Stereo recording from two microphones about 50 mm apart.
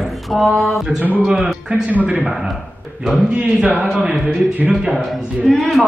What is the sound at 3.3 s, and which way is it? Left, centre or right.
A man's voice, right.